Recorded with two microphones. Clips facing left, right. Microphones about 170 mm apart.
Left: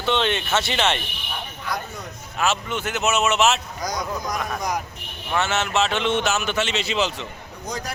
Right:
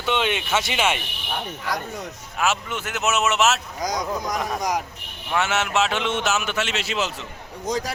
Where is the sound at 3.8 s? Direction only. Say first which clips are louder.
Right 2 dB; 15° right (ahead or behind).